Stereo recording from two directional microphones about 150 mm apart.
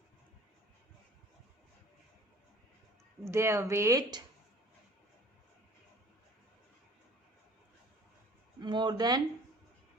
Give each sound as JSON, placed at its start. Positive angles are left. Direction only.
{"t": 3.2, "sound": "speech", "side_deg": -20}
{"t": 8.6, "sound": "speech", "side_deg": -30}